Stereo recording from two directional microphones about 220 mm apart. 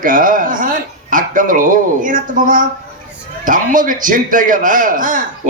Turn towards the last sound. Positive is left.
turn(degrees=-35)  # may be behind; listen again after turning